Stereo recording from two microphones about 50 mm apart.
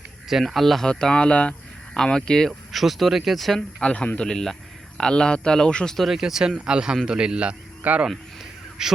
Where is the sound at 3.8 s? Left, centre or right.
Left.